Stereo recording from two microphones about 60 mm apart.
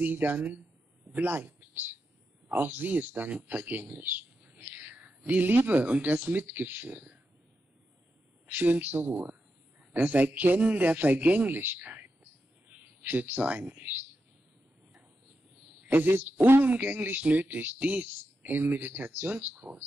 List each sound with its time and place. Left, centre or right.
0.0 s speech: right
8.5 s speech: right
12.6 s a sound: right
15.8 s speech: right